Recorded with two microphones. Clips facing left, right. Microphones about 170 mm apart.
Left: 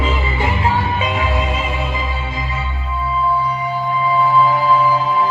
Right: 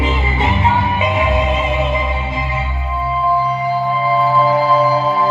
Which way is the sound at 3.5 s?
30° right (ahead or behind).